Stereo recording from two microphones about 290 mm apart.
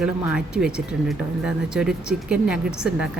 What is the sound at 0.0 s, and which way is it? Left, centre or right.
Speech, centre.